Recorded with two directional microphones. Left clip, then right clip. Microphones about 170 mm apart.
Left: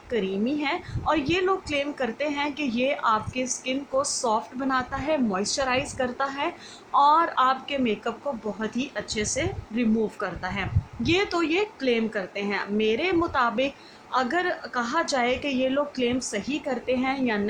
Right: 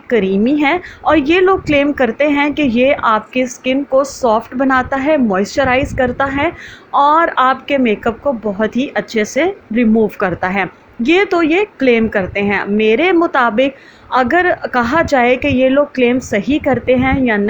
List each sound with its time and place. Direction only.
0.1 s a woman's voice: 35° right (ahead or behind)